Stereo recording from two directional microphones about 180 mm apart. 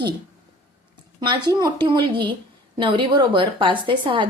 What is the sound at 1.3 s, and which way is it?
A woman's voice, 25° right (ahead or behind).